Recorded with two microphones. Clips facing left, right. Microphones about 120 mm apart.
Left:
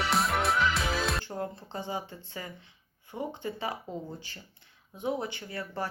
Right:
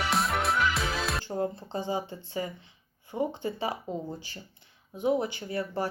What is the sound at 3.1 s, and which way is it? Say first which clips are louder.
Speech: right 6 dB; 15° right (ahead or behind).